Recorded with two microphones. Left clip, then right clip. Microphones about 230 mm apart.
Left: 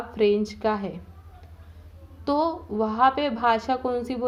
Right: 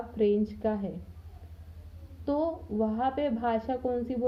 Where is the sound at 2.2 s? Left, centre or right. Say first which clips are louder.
Left 6 dB; centre.